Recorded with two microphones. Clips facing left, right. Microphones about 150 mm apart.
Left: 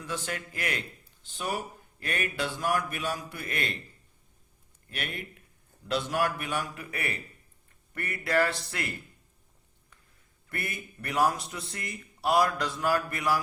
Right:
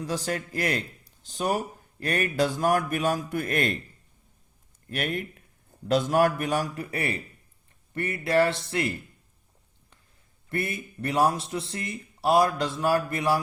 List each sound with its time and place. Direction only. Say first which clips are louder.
0.0 s a man's voice: right 6 dB; 35° right (ahead or behind)
4.9 s a man's voice: right 8 dB; 45° right (ahead or behind); by 8.9 s 25° right (ahead or behind)
10.5 s speech: right 7 dB; 30° right (ahead or behind)